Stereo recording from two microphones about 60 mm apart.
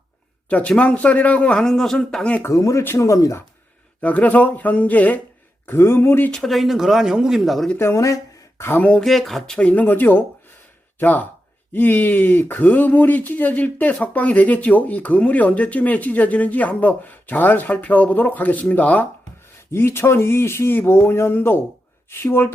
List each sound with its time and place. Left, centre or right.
0.4 s speech: left
1.5 s speech: centre
2.5 s speech: left
4.0 s speech: left
5.6 s speech: left
6.3 s speech: centre
7.8 s speech: left
8.0 s a sound: left
9.0 s speech: centre
9.6 s speech: left
9.8 s speech: left
19.7 s speech: left